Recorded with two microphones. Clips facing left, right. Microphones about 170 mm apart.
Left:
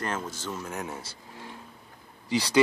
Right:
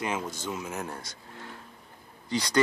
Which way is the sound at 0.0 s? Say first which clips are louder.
Right 1 dB; 10° right (ahead or behind).